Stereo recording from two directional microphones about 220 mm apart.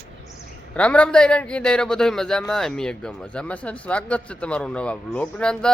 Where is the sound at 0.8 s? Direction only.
5° left (ahead or behind).